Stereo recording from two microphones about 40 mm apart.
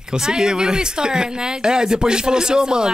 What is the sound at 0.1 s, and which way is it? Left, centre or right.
Speech, centre.